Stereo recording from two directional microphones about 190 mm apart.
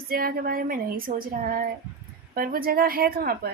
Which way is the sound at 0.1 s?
50° right (ahead or behind).